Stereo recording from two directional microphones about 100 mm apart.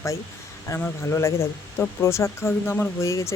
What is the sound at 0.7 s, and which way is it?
Speech, 30° left (ahead or behind).